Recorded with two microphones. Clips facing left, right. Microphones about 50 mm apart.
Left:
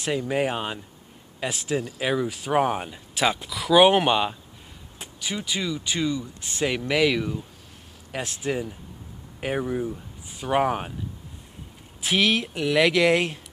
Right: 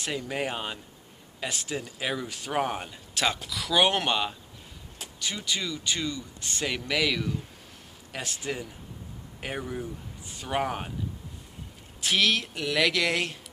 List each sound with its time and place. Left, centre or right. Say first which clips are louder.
0.0 s speech: left 6 dB; centre
12.0 s speech: left 3 dB; centre